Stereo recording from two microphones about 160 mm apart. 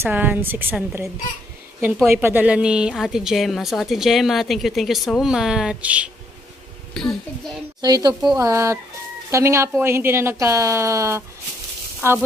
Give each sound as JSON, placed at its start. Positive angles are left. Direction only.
{"t": 0.0, "sound": "speech", "side_deg": -10}
{"t": 2.2, "sound": "a woman's voice", "side_deg": -10}
{"t": 6.9, "sound": "a child's voice", "side_deg": 0}
{"t": 7.8, "sound": "a woman's voice", "side_deg": -25}